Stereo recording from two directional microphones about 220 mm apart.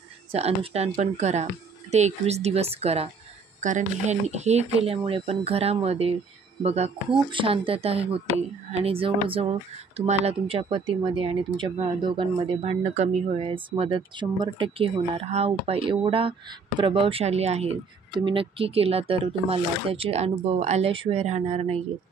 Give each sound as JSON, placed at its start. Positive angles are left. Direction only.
{"t": 0.3, "sound": "speech", "side_deg": -25}